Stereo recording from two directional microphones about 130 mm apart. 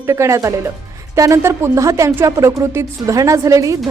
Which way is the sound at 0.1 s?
20° right (ahead or behind).